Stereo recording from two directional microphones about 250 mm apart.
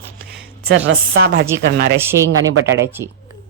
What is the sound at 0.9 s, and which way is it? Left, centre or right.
Speech, right.